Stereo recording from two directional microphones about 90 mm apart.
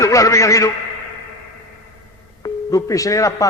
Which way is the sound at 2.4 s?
40° left (ahead or behind).